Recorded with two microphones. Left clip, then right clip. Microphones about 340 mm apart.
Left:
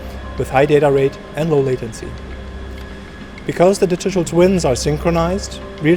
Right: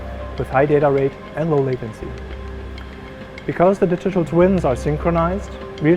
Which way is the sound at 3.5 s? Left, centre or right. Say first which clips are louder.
Left 2 dB; right.